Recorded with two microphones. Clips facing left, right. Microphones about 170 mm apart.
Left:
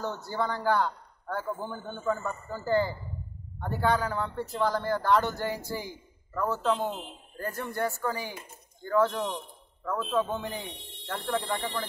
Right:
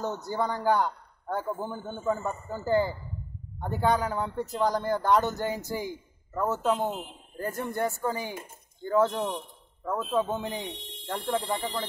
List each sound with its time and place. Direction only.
0.0 s speech: 20° right (ahead or behind)